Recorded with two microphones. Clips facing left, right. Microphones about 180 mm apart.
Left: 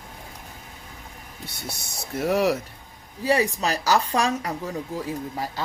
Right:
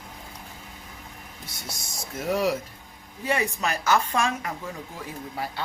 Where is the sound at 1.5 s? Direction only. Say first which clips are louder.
Left 2 dB; 65° left (ahead or behind).